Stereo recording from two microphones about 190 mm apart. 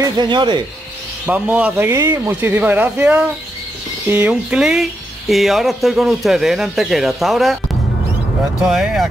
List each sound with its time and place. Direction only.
0.0 s speech: 25° right (ahead or behind)
1.2 s speech: 10° right (ahead or behind)
8.6 s speech: centre (ahead or behind)